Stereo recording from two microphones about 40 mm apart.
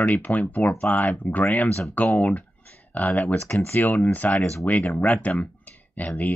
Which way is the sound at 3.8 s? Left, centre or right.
Left.